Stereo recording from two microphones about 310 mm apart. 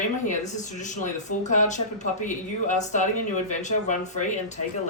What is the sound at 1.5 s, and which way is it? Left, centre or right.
Speech, left.